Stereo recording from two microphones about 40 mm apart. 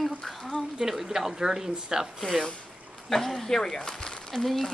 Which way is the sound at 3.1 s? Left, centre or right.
Centre.